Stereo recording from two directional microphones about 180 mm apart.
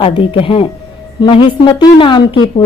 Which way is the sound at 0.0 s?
30° left (ahead or behind).